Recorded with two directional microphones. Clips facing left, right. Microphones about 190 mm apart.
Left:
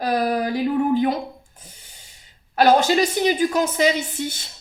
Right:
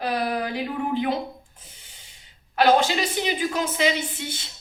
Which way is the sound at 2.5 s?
40° left (ahead or behind).